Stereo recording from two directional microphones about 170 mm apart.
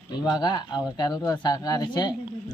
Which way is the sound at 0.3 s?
25° left (ahead or behind).